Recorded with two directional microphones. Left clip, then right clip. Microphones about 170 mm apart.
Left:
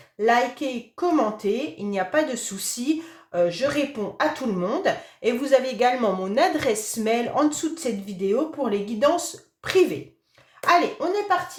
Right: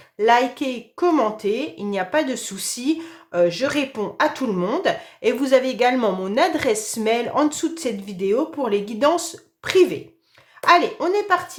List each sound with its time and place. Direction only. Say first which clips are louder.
0.2 s speech: right 3 dB; 35° right (ahead or behind)